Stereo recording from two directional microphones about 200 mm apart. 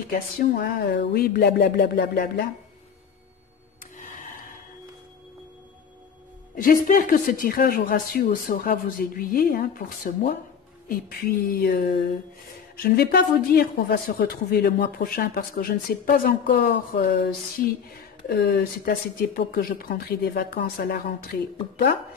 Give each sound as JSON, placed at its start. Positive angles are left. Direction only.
{"t": 0.1, "sound": "speech", "side_deg": 50}
{"t": 3.8, "sound": "music", "side_deg": 40}
{"t": 6.5, "sound": "speech", "side_deg": 45}